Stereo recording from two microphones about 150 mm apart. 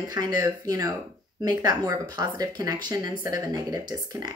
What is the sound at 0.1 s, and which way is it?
Speech, 25° right (ahead or behind).